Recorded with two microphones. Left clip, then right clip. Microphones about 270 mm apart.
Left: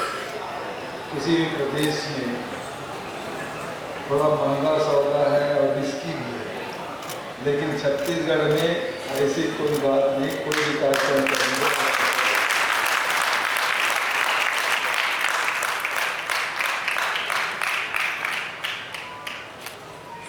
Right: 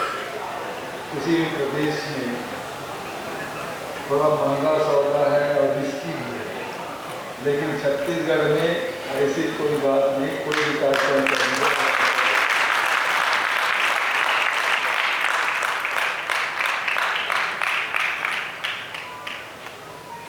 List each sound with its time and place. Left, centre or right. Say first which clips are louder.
1.4 s speech: even; centre
4.1 s a man's voice: right 1 dB; centre
7.6 s speech: right 1 dB; centre
9.8 s a sound: right 1 dB; centre